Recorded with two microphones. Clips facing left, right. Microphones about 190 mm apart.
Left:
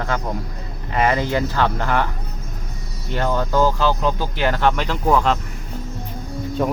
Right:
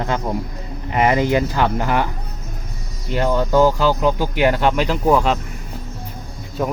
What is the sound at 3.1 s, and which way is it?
Speech, 15° right (ahead or behind).